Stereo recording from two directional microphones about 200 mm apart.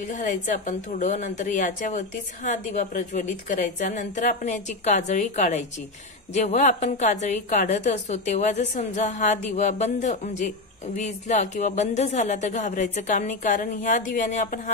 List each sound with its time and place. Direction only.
0.1 s a woman's voice: 40° left (ahead or behind)